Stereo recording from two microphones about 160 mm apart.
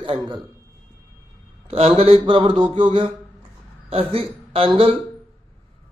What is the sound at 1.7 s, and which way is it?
A man's voice, 40° right (ahead or behind).